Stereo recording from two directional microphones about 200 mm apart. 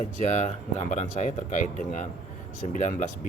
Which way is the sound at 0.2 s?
35° left (ahead or behind).